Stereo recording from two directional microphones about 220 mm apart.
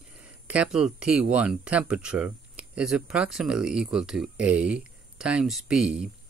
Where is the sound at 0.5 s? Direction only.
5° right (ahead or behind).